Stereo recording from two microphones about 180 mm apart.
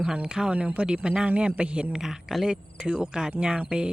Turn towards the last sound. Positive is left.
turn(degrees=-5)  # may be behind; listen again after turning